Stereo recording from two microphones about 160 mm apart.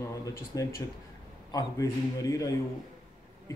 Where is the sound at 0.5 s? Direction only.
20° left (ahead or behind).